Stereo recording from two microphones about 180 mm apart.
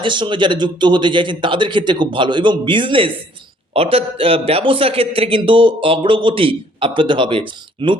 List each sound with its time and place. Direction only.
0.0 s a man's voice: 25° right (ahead or behind)